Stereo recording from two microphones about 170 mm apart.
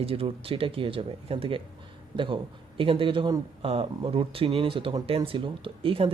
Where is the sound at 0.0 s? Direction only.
35° right (ahead or behind).